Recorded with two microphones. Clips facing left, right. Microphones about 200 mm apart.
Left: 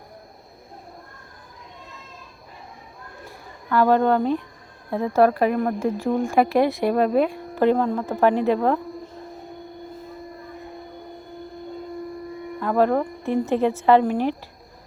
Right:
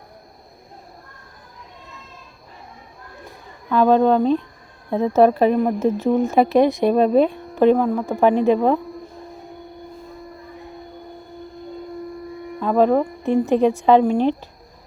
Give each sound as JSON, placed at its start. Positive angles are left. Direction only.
{"t": 3.7, "sound": "a woman's voice", "side_deg": -20}
{"t": 12.5, "sound": "a woman's voice", "side_deg": -15}